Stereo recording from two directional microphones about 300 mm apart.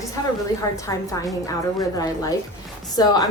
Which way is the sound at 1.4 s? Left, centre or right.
Centre.